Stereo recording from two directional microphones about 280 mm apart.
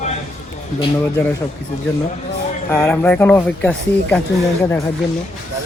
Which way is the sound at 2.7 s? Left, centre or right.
Centre.